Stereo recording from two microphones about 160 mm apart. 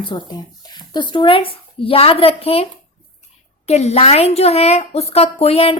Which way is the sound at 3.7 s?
40° left (ahead or behind).